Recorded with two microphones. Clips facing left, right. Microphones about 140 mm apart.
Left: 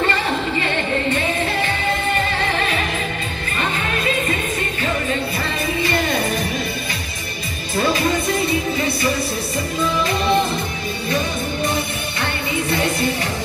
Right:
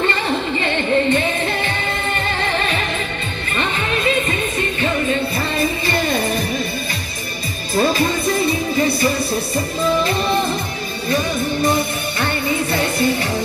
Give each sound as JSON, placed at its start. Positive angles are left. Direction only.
{"t": 0.1, "sound": "music", "side_deg": -30}
{"t": 7.7, "sound": "music", "side_deg": -35}
{"t": 12.2, "sound": "music", "side_deg": -35}